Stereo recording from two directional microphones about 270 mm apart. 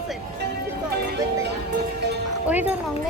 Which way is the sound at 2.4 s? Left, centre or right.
Centre.